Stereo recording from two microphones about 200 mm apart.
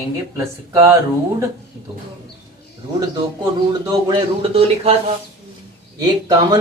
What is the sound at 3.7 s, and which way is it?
Speech, 25° right (ahead or behind).